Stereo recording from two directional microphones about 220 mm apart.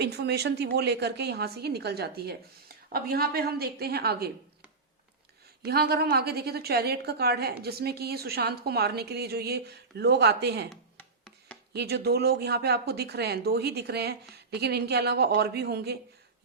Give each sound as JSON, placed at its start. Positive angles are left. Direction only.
{"t": 0.0, "sound": "a woman's voice", "side_deg": -50}
{"t": 5.6, "sound": "a woman's voice", "side_deg": -45}
{"t": 11.7, "sound": "a woman's voice", "side_deg": -50}